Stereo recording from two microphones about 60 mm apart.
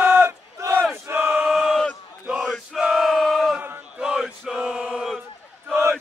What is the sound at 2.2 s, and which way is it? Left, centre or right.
Chant, centre.